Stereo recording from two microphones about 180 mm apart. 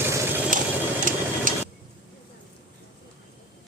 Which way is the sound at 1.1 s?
45° right (ahead or behind).